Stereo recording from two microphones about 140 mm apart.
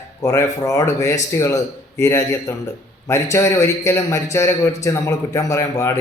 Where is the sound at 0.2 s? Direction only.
20° left (ahead or behind).